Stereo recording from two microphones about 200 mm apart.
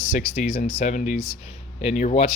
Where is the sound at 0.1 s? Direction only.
40° left (ahead or behind).